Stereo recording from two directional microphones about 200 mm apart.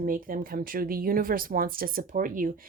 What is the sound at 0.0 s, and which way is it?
Speech, 45° right (ahead or behind).